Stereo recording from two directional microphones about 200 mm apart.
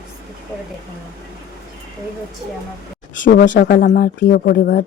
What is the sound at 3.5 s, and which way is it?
Speech, 50° left (ahead or behind).